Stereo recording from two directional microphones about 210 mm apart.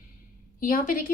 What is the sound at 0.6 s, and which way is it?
Speech, 40° left (ahead or behind).